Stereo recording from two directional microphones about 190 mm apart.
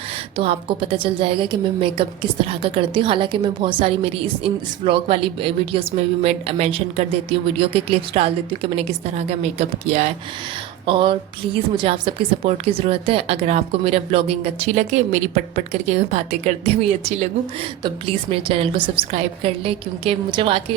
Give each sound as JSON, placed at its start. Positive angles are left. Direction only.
{"t": 0.3, "sound": "a woman's voice", "side_deg": -30}